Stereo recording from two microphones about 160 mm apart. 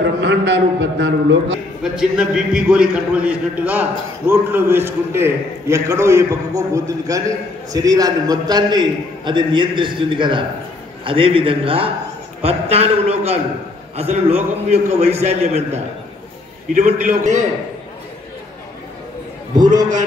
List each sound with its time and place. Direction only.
0.0 s a man's voice: 90° right
1.8 s a man's voice: 5° right (ahead or behind); by 17.5 s 50° right (ahead or behind)